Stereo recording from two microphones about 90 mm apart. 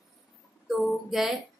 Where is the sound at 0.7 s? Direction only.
Centre (ahead or behind).